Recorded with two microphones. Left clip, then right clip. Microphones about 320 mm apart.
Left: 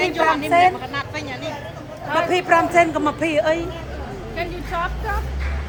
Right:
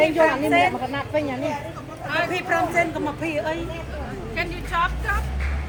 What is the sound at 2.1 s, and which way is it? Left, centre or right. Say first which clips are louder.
A man's voice: left 6 dB; left.